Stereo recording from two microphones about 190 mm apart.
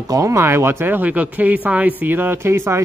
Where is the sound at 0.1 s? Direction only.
15° right (ahead or behind).